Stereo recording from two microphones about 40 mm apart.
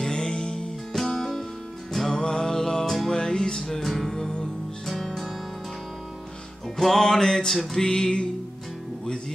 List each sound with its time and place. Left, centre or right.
0.0 s music: centre
3.6 s music: centre
6.8 s music: centre